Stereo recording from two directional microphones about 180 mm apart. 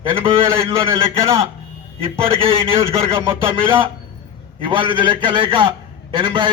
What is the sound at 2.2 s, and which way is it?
A man's voice, 30° right (ahead or behind).